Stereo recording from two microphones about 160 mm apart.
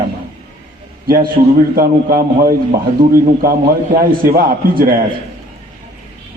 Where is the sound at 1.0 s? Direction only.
65° right (ahead or behind).